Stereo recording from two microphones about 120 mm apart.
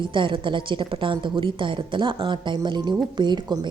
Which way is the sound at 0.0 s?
45° right (ahead or behind).